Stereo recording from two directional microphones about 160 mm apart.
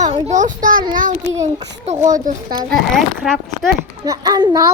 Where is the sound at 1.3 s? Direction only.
20° right (ahead or behind).